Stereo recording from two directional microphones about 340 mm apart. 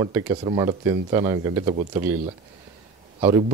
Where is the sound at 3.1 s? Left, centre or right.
Centre.